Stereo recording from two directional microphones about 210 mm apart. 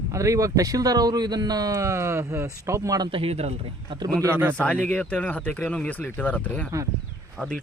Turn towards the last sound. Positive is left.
turn(degrees=10)  # may be behind; listen again after turning